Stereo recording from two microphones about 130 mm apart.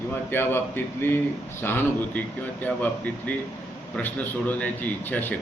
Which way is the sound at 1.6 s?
15° left (ahead or behind).